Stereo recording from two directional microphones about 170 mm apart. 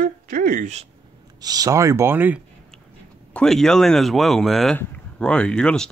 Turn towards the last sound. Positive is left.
turn(degrees=5)  # may be behind; listen again after turning